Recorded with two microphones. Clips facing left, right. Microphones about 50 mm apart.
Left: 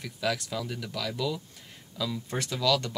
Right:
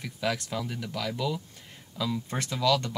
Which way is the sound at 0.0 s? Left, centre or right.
Centre.